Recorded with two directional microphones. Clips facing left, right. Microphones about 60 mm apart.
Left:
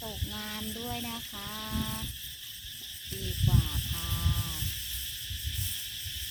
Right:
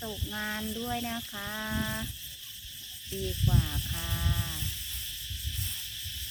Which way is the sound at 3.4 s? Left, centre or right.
Centre.